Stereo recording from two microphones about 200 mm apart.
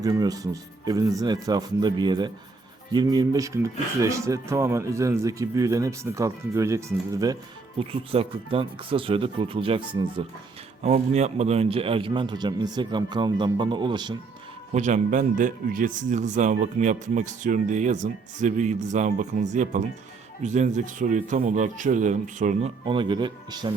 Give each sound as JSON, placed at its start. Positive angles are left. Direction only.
{"t": 0.0, "sound": "a man's voice", "side_deg": -20}
{"t": 7.8, "sound": "a man's voice", "side_deg": -30}
{"t": 10.8, "sound": "a man's voice", "side_deg": -35}
{"t": 14.7, "sound": "speech", "side_deg": -35}
{"t": 22.9, "sound": "a man's voice", "side_deg": -25}